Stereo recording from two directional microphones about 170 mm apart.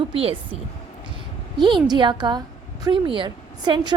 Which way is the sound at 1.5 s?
25° right (ahead or behind).